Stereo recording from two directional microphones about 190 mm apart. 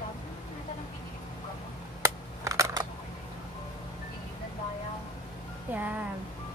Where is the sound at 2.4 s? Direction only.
20° right (ahead or behind).